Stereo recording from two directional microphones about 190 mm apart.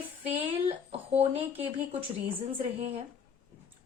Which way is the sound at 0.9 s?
30° right (ahead or behind).